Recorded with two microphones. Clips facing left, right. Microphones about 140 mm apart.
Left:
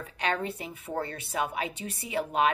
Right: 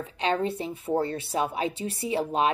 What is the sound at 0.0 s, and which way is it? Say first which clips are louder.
A woman's voice: right 4 dB; 25° right (ahead or behind).